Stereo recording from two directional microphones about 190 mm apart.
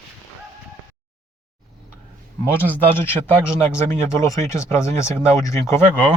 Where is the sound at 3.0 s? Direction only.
10° left (ahead or behind).